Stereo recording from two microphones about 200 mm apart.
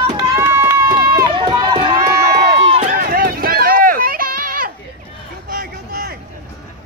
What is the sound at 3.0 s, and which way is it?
Run, 45° right (ahead or behind).